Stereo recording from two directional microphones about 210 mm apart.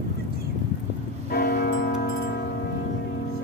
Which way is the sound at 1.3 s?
45° left (ahead or behind).